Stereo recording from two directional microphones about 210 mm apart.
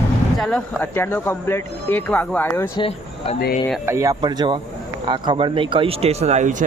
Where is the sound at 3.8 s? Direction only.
15° right (ahead or behind).